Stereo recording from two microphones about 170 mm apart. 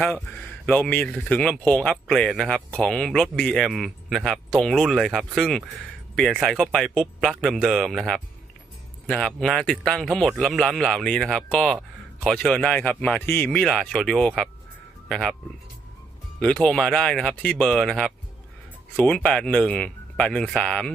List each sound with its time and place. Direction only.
0.6 s speech: 5° left (ahead or behind)
16.4 s speech: 5° left (ahead or behind)